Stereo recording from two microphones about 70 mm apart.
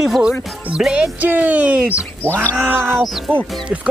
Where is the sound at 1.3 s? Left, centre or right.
Right.